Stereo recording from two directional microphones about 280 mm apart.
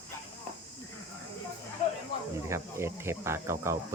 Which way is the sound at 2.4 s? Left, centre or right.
Centre.